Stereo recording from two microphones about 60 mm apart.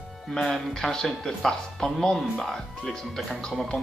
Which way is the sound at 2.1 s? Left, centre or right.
Centre.